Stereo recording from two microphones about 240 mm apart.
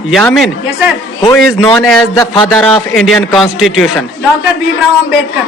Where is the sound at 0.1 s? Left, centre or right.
Centre.